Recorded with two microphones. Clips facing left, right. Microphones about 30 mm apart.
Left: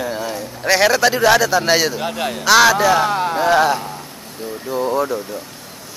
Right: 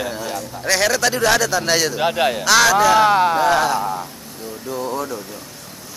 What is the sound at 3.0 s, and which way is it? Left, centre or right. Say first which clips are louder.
Speech: right 4 dB; centre.